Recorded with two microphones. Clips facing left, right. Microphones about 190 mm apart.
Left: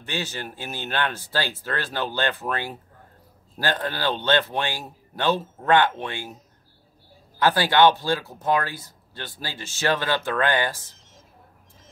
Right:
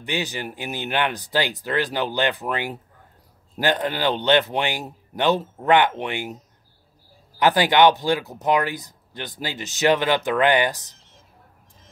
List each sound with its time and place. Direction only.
0.0 s speech: 15° right (ahead or behind)
7.3 s speech: 15° right (ahead or behind)